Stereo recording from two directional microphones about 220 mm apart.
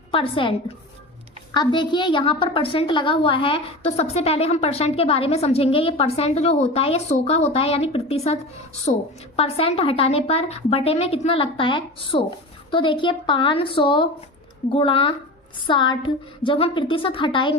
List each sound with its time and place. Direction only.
0.1 s a woman's voice: 25° left (ahead or behind)
1.5 s a woman's voice: 20° left (ahead or behind)